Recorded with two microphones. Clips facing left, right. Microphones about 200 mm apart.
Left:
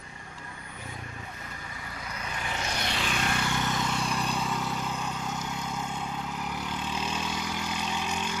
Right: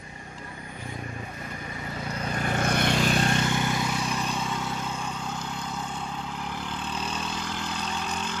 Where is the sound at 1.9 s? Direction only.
30° right (ahead or behind).